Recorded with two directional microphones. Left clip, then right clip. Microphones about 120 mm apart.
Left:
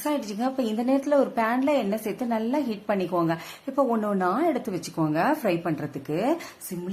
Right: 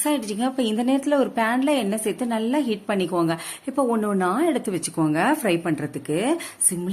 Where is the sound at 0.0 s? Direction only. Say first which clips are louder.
Right 3 dB; 20° right (ahead or behind).